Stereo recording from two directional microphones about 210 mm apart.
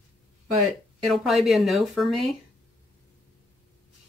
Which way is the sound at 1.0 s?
Centre (ahead or behind).